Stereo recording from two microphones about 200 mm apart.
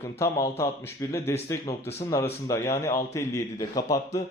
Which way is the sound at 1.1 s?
15° left (ahead or behind).